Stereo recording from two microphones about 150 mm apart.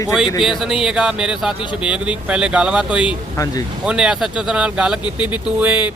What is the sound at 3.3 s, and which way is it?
Speech, 25° left (ahead or behind).